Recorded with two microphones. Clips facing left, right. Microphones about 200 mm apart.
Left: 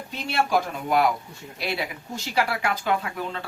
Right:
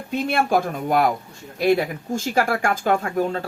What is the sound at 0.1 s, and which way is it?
Speech, 50° right (ahead or behind).